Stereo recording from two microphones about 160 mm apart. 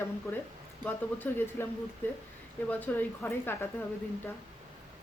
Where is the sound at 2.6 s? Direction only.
10° left (ahead or behind).